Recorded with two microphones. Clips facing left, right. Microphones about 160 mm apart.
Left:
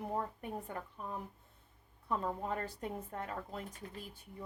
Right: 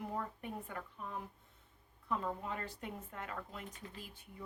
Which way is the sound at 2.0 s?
35° left (ahead or behind).